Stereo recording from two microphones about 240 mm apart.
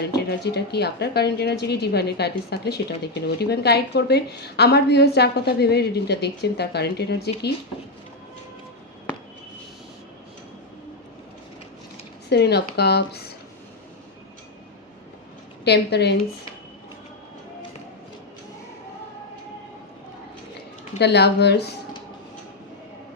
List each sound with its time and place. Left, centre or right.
0.2 s speech: left
12.3 s speech: left
15.6 s speech: left
21.0 s speech: left